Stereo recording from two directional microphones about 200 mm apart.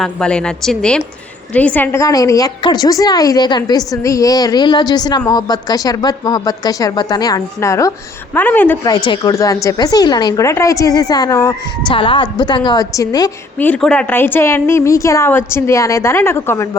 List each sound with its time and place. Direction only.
0.0 s a woman's voice: 5° left (ahead or behind)
13.7 s a woman's voice: 5° left (ahead or behind)